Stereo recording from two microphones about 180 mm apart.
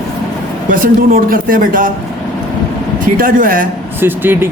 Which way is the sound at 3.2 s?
50° right (ahead or behind).